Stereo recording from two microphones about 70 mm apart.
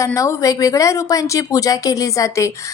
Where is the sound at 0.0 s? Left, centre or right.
Left.